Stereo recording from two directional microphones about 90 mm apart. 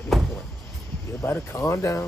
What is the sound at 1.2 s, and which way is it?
Speech, 30° left (ahead or behind).